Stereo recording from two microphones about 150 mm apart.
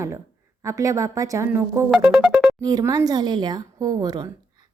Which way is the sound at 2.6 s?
25° right (ahead or behind).